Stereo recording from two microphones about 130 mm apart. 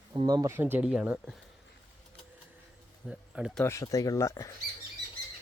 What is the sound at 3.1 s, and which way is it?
Speech, 5° right (ahead or behind).